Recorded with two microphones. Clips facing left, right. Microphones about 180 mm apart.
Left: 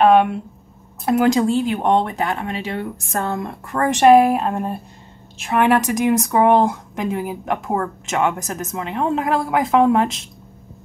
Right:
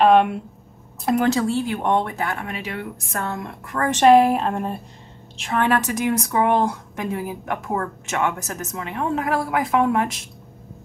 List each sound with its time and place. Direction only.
0.0 s a woman's voice: centre (ahead or behind)
1.3 s speech: 20° left (ahead or behind)
4.0 s a woman's voice: 5° left (ahead or behind)
5.5 s speech: 15° left (ahead or behind)